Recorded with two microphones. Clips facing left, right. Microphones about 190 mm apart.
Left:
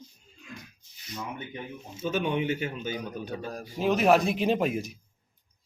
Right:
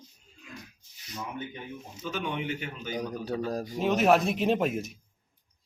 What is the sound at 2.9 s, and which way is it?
Speech, 40° right (ahead or behind).